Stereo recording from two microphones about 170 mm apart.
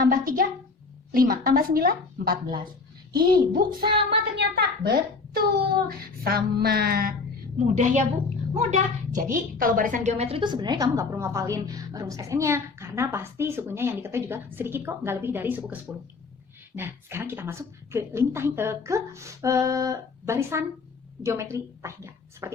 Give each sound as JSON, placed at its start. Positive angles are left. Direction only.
{"t": 0.0, "sound": "speech", "side_deg": -55}
{"t": 3.8, "sound": "music", "side_deg": -30}
{"t": 4.4, "sound": "a child's voice", "side_deg": -65}
{"t": 7.6, "sound": "a woman's voice", "side_deg": -45}
{"t": 9.3, "sound": "a woman's voice", "side_deg": -55}